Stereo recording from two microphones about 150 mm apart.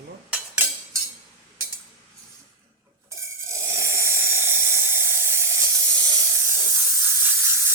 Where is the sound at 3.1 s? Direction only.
20° right (ahead or behind).